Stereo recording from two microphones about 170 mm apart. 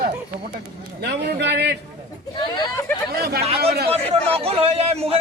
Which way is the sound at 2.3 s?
25° left (ahead or behind).